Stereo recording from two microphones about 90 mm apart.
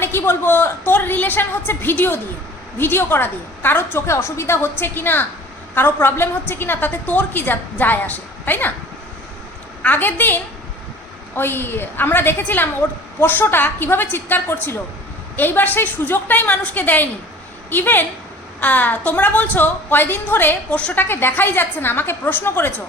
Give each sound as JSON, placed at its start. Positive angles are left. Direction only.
{"t": 0.0, "sound": "a woman's voice", "side_deg": 25}
{"t": 9.8, "sound": "a woman's voice", "side_deg": 20}